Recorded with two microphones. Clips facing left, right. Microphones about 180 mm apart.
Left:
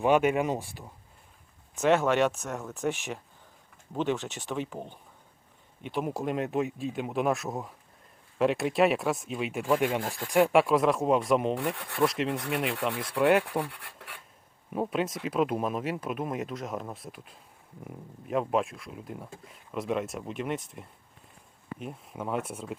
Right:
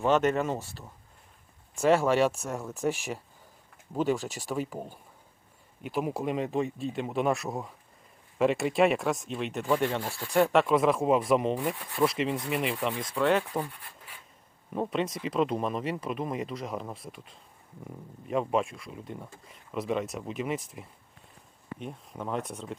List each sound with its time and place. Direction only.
0.0 s speech: 10° left (ahead or behind)
1.7 s speech: centre (ahead or behind)
3.9 s speech: centre (ahead or behind)
11.7 s rub: 65° left (ahead or behind)
11.9 s speech: centre (ahead or behind)
13.1 s speech: 10° left (ahead or behind)
13.7 s speech: 70° left (ahead or behind)
14.7 s speech: 5° left (ahead or behind)